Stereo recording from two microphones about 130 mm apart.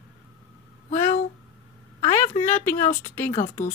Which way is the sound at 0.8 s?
70° left (ahead or behind).